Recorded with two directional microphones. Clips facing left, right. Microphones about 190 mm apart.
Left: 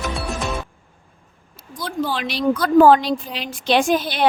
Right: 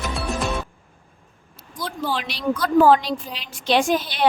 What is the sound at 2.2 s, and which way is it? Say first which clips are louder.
A woman's voice: left 5 dB; 55° left (ahead or behind).